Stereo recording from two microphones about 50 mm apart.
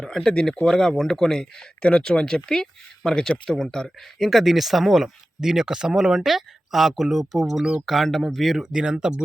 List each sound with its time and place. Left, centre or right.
0.0 s speech: centre
4.3 s speech: centre
8.6 s speech: centre